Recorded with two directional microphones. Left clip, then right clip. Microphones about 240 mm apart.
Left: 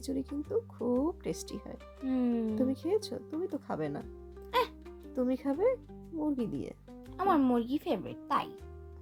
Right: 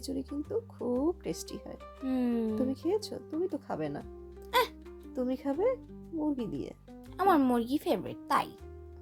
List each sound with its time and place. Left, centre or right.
0.0 s speech: centre
2.0 s a child's voice: centre
2.6 s speech: centre
4.5 s music: centre
5.1 s speech: centre
7.2 s a child's voice: centre